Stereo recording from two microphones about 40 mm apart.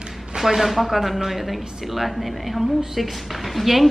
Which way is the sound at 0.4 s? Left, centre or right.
Centre.